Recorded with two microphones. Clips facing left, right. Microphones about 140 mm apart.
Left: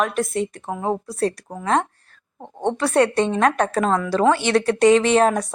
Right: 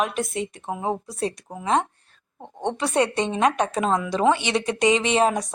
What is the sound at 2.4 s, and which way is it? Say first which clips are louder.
Speech: left 4 dB; 10° left (ahead or behind).